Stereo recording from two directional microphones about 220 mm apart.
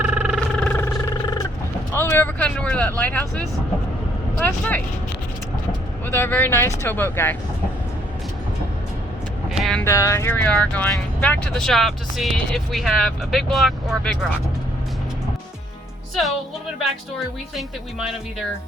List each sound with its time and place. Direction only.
0.0 s a sound: 5° right (ahead or behind); by 1.5 s 15° left (ahead or behind)
1.9 s speech: 10° left (ahead or behind)
6.1 s speech: 10° left (ahead or behind)
9.5 s vehicle: centre (ahead or behind)
9.8 s speech: 15° left (ahead or behind)